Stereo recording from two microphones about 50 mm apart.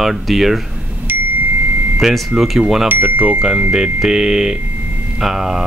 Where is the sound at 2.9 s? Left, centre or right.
Right.